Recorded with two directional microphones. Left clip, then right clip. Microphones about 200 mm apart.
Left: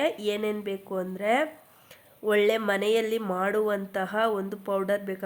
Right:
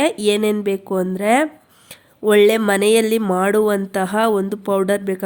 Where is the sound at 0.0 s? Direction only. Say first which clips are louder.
Right 10 dB; 45° right (ahead or behind).